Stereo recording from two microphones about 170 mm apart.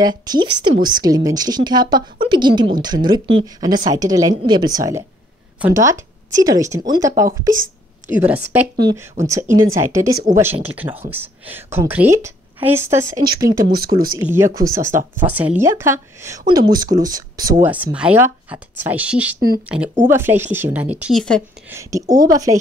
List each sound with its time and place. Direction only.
0.0 s a woman's voice: 25° right (ahead or behind)
8.1 s speech: 10° right (ahead or behind)
8.7 s a woman's voice: 20° right (ahead or behind)
17.9 s speech: 10° right (ahead or behind)
21.1 s speech: 5° left (ahead or behind)
21.6 s a woman's voice: 15° right (ahead or behind)